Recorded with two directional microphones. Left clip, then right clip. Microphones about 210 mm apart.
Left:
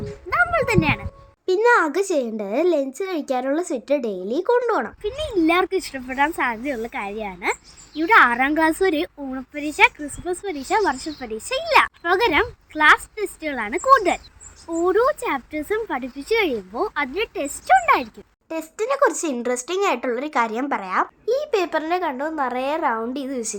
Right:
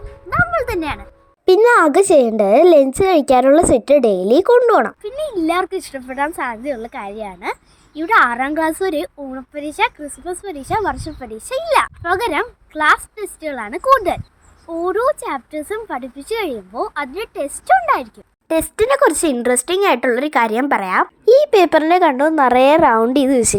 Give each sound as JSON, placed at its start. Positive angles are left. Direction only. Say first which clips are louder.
{"t": 0.3, "sound": "a sound", "louder": "right 2 dB", "side_deg": -10}
{"t": 1.5, "sound": "a child's voice", "louder": "right 6 dB", "side_deg": -30}
{"t": 5.0, "sound": "speech", "louder": "right 1 dB", "side_deg": -10}
{"t": 18.4, "sound": "speech", "louder": "right 9 dB", "side_deg": -25}